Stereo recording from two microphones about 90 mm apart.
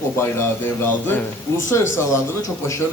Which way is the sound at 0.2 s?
25° left (ahead or behind).